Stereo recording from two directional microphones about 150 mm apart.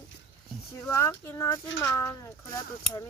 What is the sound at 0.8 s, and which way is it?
Speech, 20° left (ahead or behind).